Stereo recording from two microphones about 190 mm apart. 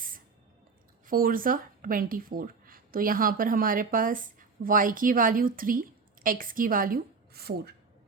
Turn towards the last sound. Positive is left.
turn(degrees=-55)  # may be behind; listen again after turning